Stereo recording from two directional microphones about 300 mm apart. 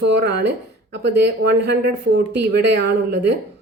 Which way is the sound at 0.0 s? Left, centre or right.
Right.